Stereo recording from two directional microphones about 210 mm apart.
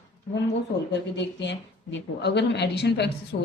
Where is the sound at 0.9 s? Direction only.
55° left (ahead or behind).